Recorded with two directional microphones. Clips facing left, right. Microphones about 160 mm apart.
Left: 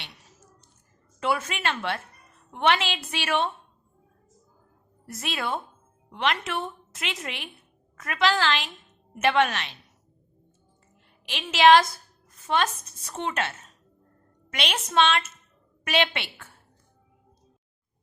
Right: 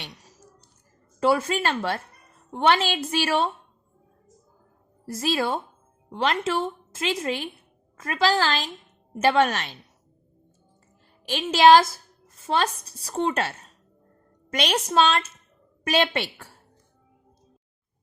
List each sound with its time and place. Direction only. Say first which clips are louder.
0.0 s a sound: right 5 dB; 35° right (ahead or behind)
1.2 s a woman's voice: right 5 dB; 35° right (ahead or behind)
5.0 s a woman's voice: right 6 dB; 35° right (ahead or behind)
11.3 s a woman's voice: right 2 dB; 40° right (ahead or behind)